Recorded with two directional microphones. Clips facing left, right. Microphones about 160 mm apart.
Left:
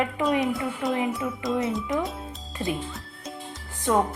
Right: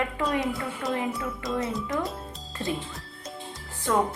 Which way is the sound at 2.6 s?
15° left (ahead or behind).